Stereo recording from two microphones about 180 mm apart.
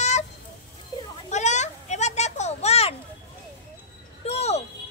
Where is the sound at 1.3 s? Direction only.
40° left (ahead or behind).